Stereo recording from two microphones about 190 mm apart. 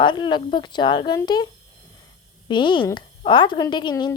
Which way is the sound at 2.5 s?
25° left (ahead or behind).